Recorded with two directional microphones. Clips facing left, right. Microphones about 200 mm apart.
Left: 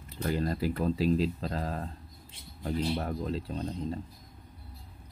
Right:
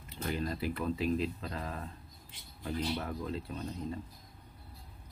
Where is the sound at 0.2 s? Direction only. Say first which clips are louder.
Left 5 dB; 40° left (ahead or behind).